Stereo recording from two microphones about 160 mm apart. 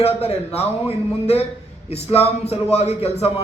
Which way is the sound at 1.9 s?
40° left (ahead or behind).